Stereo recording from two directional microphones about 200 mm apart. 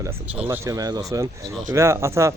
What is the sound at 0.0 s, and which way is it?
A man's voice, 10° right (ahead or behind).